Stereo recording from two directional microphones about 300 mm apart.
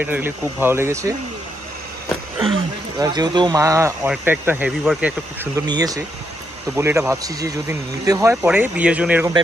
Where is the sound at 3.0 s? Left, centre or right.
Centre.